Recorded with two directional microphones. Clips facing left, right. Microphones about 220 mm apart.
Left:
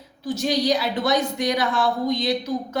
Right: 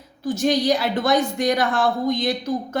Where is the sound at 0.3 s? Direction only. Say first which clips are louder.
Right 2 dB; 50° right (ahead or behind).